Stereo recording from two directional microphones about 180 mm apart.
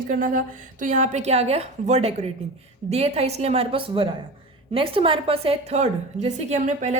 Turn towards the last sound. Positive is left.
turn(degrees=-40)  # may be behind; listen again after turning